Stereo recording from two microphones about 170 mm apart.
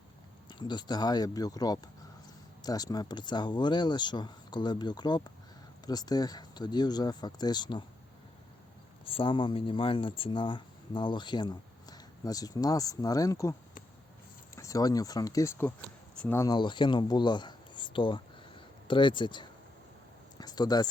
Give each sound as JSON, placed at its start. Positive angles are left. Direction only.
{"t": 0.6, "sound": "speech", "side_deg": 25}
{"t": 9.0, "sound": "speech", "side_deg": 30}
{"t": 16.5, "sound": "speech", "side_deg": 25}
{"t": 20.4, "sound": "a sound", "side_deg": 25}